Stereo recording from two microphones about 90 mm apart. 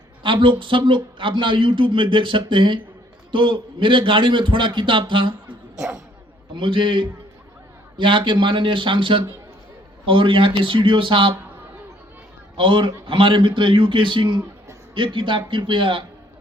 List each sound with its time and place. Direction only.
0.2 s a man's voice: 65° right (ahead or behind)
6.6 s a man's voice: 65° right (ahead or behind)
12.5 s a man's voice: 65° right (ahead or behind)